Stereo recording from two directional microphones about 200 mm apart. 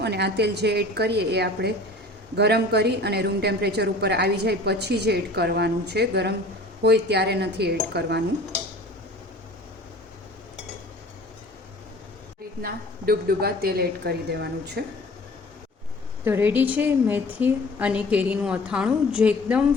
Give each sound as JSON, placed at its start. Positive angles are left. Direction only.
{"t": 0.0, "sound": "a woman's voice", "side_deg": -55}
{"t": 12.6, "sound": "a woman's voice", "side_deg": -50}
{"t": 16.2, "sound": "a woman's voice", "side_deg": -10}